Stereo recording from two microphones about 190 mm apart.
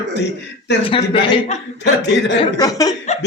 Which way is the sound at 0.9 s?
25° left (ahead or behind).